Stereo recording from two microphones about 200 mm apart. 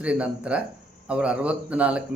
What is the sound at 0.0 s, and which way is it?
A man's voice, 5° right (ahead or behind).